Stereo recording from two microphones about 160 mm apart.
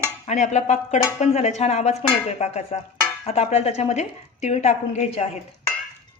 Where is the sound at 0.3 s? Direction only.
50° left (ahead or behind).